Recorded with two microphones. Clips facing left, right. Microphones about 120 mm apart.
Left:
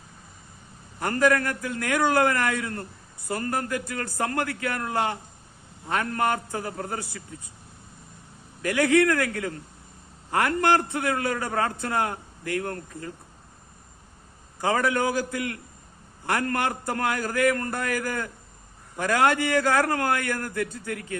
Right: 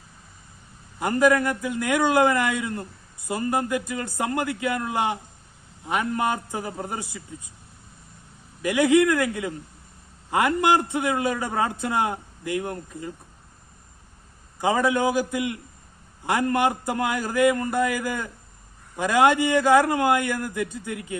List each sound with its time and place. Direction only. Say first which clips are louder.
0.9 s a man's voice: right 2 dB; 15° right (ahead or behind)
8.6 s a man's voice: right 2 dB; 15° right (ahead or behind)
14.6 s a man's voice: right 2 dB; 20° right (ahead or behind)